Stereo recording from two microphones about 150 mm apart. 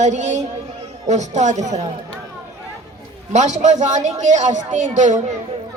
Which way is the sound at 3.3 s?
50° right (ahead or behind).